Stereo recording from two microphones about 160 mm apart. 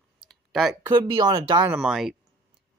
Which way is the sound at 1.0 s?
25° right (ahead or behind).